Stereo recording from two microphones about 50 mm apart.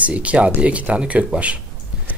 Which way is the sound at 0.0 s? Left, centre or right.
Right.